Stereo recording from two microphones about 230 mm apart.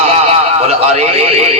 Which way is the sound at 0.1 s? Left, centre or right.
Right.